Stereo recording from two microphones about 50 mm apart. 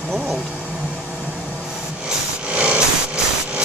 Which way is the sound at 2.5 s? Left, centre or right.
Right.